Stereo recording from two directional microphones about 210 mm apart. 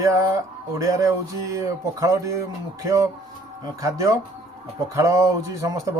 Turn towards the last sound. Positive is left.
turn(degrees=-15)  # may be behind; listen again after turning